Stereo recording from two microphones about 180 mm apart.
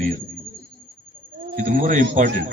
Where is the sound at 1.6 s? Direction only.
45° right (ahead or behind).